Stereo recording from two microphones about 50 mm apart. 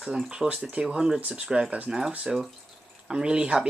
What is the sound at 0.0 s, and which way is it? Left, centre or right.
Speech, centre.